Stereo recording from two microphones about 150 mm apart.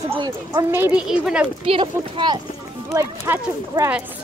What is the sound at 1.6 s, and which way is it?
Speech, 35° right (ahead or behind).